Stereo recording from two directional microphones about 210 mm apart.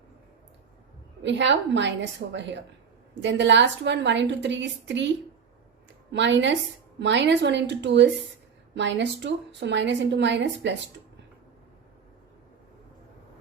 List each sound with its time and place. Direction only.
1.2 s a woman's voice: 60° right (ahead or behind)